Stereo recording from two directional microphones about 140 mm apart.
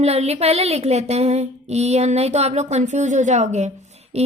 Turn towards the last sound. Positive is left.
turn(degrees=-50)  # may be behind; listen again after turning